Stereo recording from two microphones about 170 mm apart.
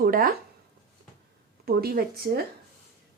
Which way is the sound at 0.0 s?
60° right (ahead or behind).